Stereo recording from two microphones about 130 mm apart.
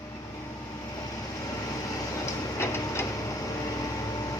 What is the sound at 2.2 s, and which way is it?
Train, 20° left (ahead or behind).